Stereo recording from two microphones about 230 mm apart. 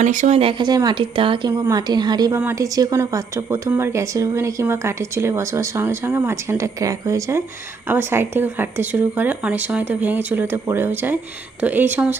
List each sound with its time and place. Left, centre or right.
0.0 s speech: right; by 12.1 s centre